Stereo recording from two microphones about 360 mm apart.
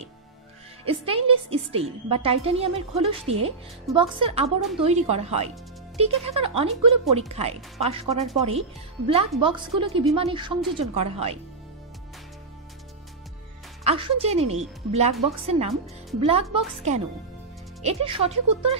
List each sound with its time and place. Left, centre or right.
0.8 s a woman's voice: centre
13.8 s a woman's voice: centre